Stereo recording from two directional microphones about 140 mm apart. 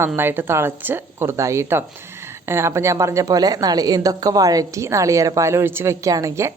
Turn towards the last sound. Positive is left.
turn(degrees=-25)  # may be behind; listen again after turning